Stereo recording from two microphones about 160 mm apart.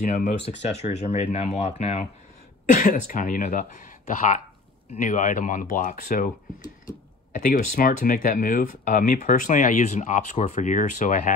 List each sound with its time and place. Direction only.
0.0 s speech: 50° left (ahead or behind)
2.7 s speech: 55° left (ahead or behind)
4.9 s speech: 55° left (ahead or behind)
7.3 s speech: 60° left (ahead or behind)